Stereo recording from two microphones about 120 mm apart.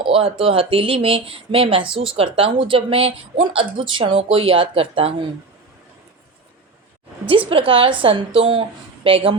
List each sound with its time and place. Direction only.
0.0 s speech: 50° right (ahead or behind)
7.3 s speech: 50° right (ahead or behind)